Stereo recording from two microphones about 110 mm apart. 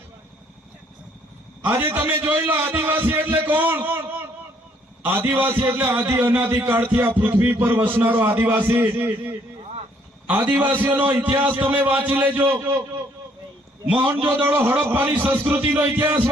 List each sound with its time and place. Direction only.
1.6 s a man's voice: 20° right (ahead or behind)
14.1 s a man's voice: 15° right (ahead or behind)